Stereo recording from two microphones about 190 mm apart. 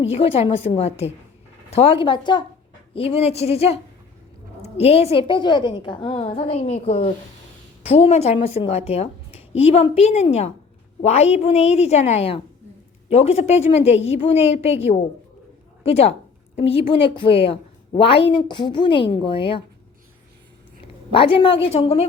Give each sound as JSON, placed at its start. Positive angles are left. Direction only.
{"t": 0.0, "sound": "a woman's voice", "side_deg": 30}
{"t": 20.8, "sound": "a woman's voice", "side_deg": 30}